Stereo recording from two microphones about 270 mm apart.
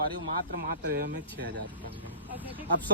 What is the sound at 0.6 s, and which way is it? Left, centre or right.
Speech, right.